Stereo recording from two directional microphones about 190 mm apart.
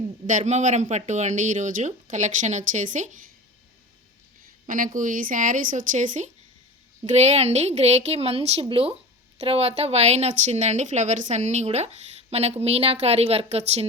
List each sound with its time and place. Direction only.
0.3 s speech: 40° right (ahead or behind)
4.6 s speech: 45° right (ahead or behind)